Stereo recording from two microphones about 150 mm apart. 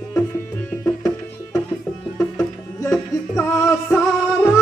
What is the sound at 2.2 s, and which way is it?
Music, 20° left (ahead or behind).